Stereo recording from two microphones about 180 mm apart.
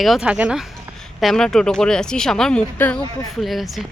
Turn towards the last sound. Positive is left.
turn(degrees=0)  # may be behind; listen again after turning